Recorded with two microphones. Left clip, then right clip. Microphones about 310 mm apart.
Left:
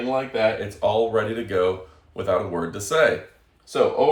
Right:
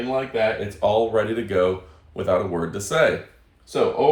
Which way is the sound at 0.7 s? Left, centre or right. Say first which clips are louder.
Right 1 dB; centre.